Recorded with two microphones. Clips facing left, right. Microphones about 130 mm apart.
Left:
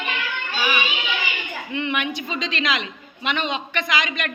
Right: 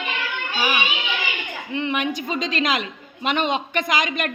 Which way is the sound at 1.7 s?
35° right (ahead or behind).